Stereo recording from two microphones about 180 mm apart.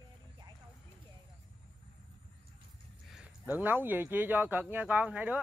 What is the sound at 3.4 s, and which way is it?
Speech, 10° right (ahead or behind).